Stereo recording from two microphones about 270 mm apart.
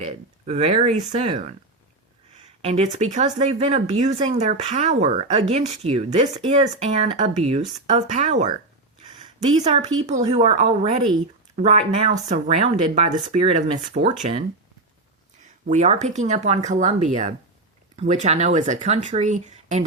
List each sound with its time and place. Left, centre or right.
0.0 s speech: right
2.6 s speech: right
9.6 s speech: right
15.6 s speech: right